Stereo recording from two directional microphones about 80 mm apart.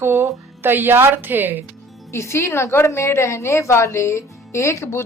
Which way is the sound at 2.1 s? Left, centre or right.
Left.